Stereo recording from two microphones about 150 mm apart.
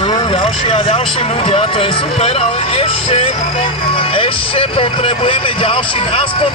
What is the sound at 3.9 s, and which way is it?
Speech, 35° left (ahead or behind).